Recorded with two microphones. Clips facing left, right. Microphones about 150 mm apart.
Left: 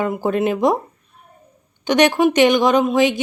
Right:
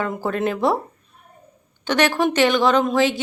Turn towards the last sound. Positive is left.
turn(degrees=15)  # may be behind; listen again after turning